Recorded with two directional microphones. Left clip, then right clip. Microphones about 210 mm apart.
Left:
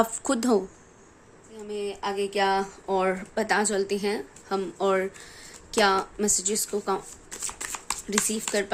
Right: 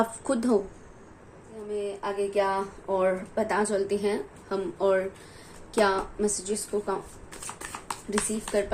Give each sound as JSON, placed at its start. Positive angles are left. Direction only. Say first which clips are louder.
{"t": 0.0, "sound": "a woman's voice", "louder": "left 2 dB", "side_deg": 40}
{"t": 1.7, "sound": "a woman's voice", "louder": "left 1 dB", "side_deg": 45}